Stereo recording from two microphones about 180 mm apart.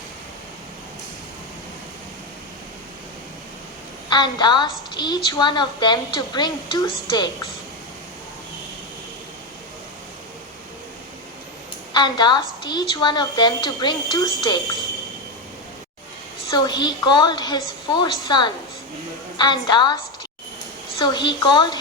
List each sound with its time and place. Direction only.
4.1 s a woman's voice: 25° left (ahead or behind)
11.9 s a woman's voice: 25° left (ahead or behind)
16.6 s a woman's voice: 25° left (ahead or behind)
21.0 s a woman's voice: 25° left (ahead or behind)